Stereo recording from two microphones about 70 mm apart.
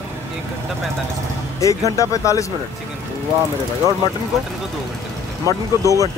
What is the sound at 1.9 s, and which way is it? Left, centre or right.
Speech, left.